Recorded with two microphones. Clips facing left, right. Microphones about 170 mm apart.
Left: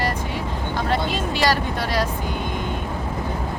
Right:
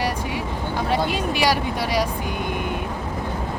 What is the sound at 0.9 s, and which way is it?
Vehicle, 10° right (ahead or behind).